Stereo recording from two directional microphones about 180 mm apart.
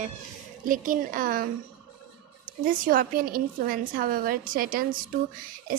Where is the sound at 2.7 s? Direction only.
50° right (ahead or behind).